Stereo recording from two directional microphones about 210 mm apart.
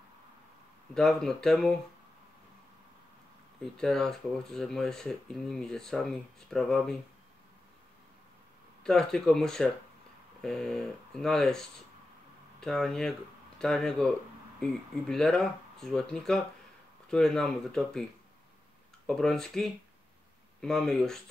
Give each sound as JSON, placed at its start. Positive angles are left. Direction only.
{"t": 0.9, "sound": "speech", "side_deg": 0}
{"t": 3.7, "sound": "speech", "side_deg": 0}
{"t": 8.8, "sound": "speech", "side_deg": 5}
{"t": 19.0, "sound": "speech", "side_deg": 0}